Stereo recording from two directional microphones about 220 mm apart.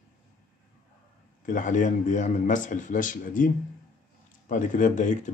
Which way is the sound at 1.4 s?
35° left (ahead or behind).